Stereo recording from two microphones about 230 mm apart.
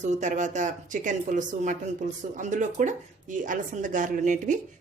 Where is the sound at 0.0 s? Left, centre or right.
Right.